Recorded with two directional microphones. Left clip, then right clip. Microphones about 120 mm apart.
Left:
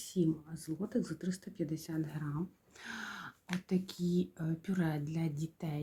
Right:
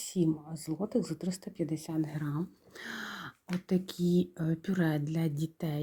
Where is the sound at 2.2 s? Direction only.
40° right (ahead or behind).